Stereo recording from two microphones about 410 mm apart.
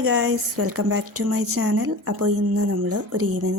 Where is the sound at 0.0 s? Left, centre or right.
Right.